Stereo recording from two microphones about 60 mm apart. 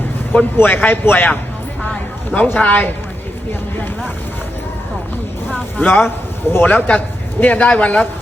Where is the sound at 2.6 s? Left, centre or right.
Left.